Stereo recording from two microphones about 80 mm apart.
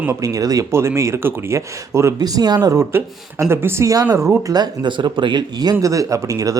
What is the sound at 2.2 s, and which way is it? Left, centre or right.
Speech, right.